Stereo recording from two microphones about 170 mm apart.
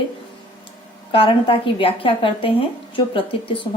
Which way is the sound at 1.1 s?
30° left (ahead or behind).